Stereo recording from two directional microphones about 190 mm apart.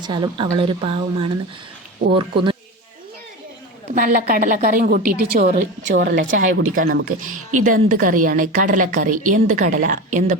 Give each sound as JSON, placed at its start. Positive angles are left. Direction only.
{"t": 0.0, "sound": "speech", "side_deg": -25}
{"t": 3.9, "sound": "a woman's voice", "side_deg": -50}
{"t": 5.9, "sound": "a woman's voice", "side_deg": -70}
{"t": 6.3, "sound": "a woman's voice", "side_deg": -50}